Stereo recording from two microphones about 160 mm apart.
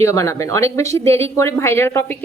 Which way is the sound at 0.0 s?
20° left (ahead or behind).